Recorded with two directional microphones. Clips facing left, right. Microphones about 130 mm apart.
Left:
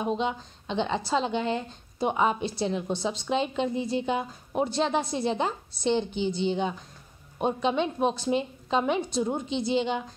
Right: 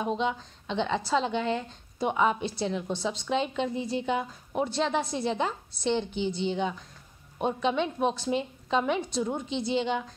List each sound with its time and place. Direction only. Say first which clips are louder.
0.0 s a woman's voice: left 1 dB; 20° left (ahead or behind)
6.1 s a woman's voice: left 2 dB; 20° right (ahead or behind)
7.3 s a woman's voice: left 1 dB; 20° left (ahead or behind)